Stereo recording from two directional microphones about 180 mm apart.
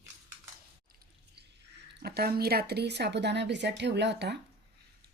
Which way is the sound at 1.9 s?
65° right (ahead or behind).